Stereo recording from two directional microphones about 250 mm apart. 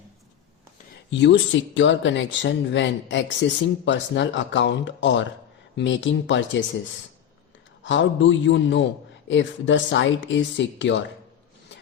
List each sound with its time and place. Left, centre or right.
1.1 s speech: left
7.9 s speech: left